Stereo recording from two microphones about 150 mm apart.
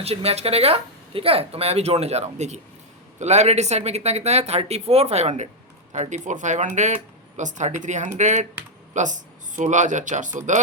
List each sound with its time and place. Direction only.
0.0 s speech: 40° right (ahead or behind); by 10.6 s 55° right (ahead or behind)